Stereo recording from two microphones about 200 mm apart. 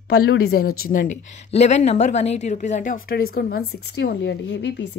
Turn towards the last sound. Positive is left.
turn(degrees=60)  # may be behind; listen again after turning